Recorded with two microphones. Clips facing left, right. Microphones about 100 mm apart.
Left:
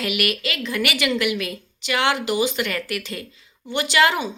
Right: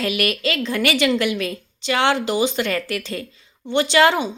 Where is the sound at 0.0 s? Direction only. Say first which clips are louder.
Right 3 dB; 30° right (ahead or behind).